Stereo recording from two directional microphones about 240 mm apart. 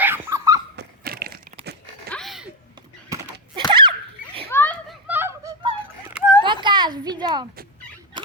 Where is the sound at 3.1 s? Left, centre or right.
Centre.